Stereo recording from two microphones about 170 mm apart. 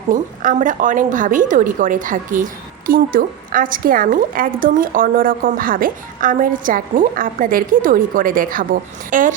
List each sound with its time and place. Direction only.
0.1 s a woman's voice: 50° right (ahead or behind)